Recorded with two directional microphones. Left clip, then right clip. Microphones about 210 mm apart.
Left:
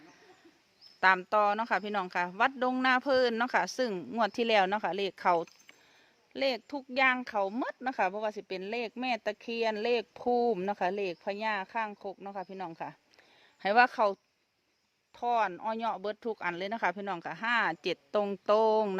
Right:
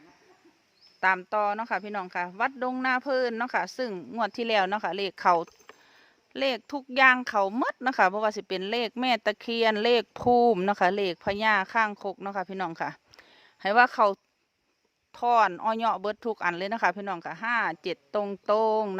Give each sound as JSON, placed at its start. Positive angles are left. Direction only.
{"t": 0.9, "sound": "speech", "side_deg": 5}
{"t": 13.6, "sound": "speech", "side_deg": -10}